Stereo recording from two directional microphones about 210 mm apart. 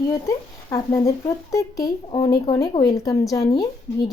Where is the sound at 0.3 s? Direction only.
15° left (ahead or behind).